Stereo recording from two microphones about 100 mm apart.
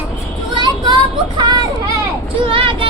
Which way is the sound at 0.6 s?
50° right (ahead or behind).